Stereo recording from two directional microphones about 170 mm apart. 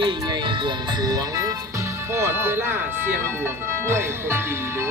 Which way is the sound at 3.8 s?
15° right (ahead or behind).